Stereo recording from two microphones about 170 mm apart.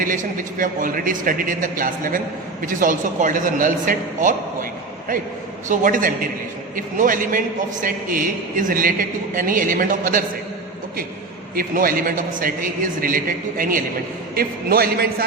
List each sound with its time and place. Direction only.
0.0 s a man's voice: 55° right (ahead or behind)
5.6 s a man's voice: 50° right (ahead or behind)
11.5 s a man's voice: 55° right (ahead or behind)